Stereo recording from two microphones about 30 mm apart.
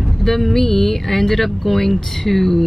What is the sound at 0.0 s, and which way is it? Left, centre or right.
Speech, centre.